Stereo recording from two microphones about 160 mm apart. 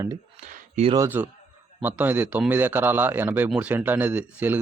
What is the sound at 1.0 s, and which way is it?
A man's voice, 10° right (ahead or behind).